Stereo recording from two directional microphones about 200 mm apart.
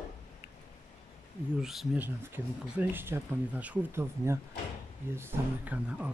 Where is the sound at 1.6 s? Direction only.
Centre (ahead or behind).